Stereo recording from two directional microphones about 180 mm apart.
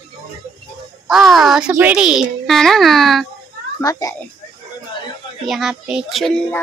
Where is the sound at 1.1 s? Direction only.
Centre (ahead or behind).